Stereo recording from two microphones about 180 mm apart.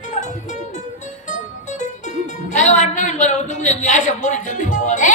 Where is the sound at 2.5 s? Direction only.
40° left (ahead or behind).